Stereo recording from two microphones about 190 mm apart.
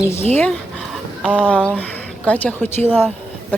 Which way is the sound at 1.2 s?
5° right (ahead or behind).